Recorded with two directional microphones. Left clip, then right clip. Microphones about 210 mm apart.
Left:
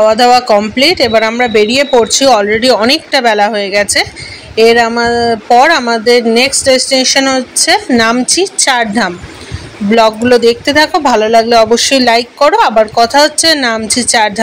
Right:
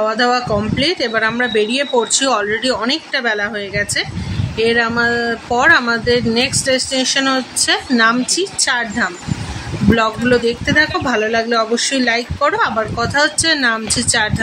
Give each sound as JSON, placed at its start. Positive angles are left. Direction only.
{"t": 0.0, "sound": "speech", "side_deg": 20}